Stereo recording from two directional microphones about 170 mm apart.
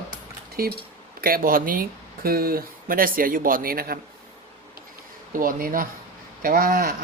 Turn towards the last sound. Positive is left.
turn(degrees=-60)  # may be behind; listen again after turning